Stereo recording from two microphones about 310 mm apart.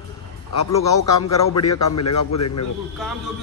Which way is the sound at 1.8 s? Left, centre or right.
Left.